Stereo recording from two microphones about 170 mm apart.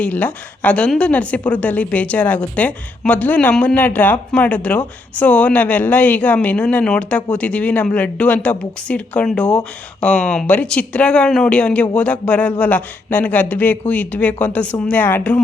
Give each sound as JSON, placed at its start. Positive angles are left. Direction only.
{"t": 0.0, "sound": "a woman's voice", "side_deg": 10}